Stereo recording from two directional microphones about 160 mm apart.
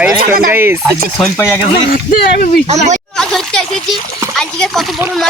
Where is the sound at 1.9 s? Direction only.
60° left (ahead or behind).